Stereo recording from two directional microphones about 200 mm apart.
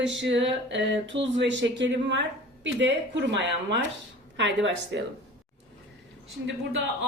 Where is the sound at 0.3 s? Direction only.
65° right (ahead or behind).